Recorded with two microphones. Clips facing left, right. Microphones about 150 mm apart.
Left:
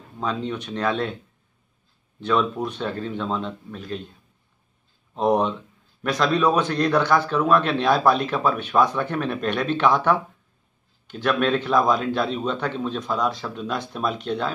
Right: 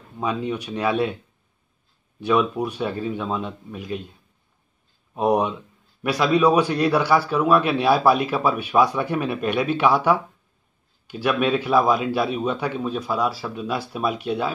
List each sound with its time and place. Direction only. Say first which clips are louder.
0.2 s a man's voice: right 2 dB; 10° right (ahead or behind)
2.1 s a man's voice: right 2 dB; 10° right (ahead or behind)
5.1 s a man's voice: even; 10° right (ahead or behind)